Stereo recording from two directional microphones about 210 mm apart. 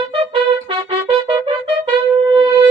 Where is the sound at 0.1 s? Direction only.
25° right (ahead or behind).